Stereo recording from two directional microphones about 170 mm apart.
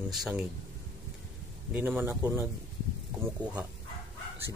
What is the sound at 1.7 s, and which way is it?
Speech, 10° right (ahead or behind).